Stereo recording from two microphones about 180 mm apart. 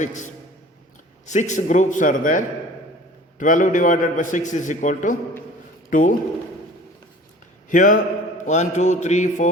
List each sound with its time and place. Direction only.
0.0 s a man's voice: 45° left (ahead or behind)
1.3 s a man's voice: 40° left (ahead or behind)
7.7 s a man's voice: 50° left (ahead or behind)